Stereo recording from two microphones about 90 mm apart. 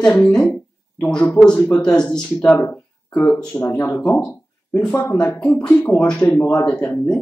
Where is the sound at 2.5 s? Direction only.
20° left (ahead or behind).